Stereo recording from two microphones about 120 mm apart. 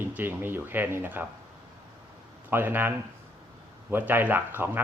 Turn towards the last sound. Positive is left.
turn(degrees=-15)  # may be behind; listen again after turning